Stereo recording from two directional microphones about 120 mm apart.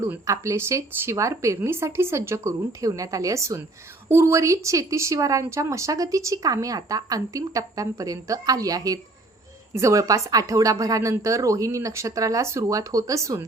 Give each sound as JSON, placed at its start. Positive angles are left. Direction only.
{"t": 0.3, "sound": "speech", "side_deg": -25}